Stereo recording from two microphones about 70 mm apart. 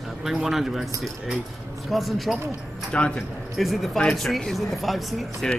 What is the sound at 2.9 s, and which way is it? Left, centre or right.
Speech, centre.